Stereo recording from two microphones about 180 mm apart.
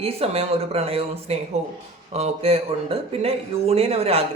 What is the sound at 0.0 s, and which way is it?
Speech, 35° right (ahead or behind).